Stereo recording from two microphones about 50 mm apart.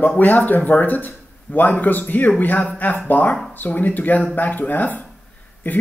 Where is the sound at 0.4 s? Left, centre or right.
Left.